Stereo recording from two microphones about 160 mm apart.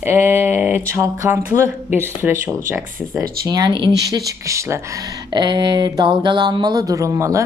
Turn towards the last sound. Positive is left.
turn(degrees=-20)  # may be behind; listen again after turning